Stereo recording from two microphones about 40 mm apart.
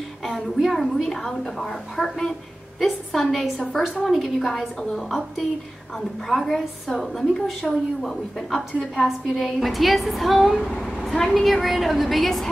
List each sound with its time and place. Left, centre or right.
0.2 s a woman's voice: centre
4.5 s a woman's voice: centre
10.5 s a woman's voice: centre